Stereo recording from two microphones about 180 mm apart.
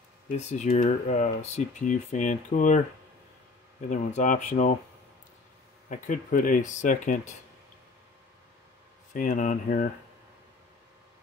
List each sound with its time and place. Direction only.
0.4 s speech: 40° left (ahead or behind)
3.9 s speech: 45° left (ahead or behind)
5.9 s speech: 45° left (ahead or behind)
9.1 s speech: 45° left (ahead or behind)